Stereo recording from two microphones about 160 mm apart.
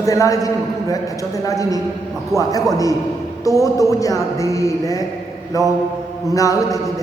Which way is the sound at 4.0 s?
20° left (ahead or behind).